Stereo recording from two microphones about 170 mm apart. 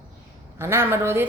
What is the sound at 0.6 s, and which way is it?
Speech, 15° right (ahead or behind).